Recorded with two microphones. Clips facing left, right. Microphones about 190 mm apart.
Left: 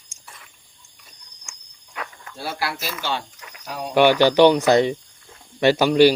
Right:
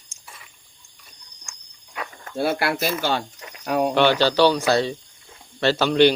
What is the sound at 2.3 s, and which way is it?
Speech, 55° right (ahead or behind).